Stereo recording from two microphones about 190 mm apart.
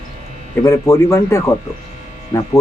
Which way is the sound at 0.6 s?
15° left (ahead or behind).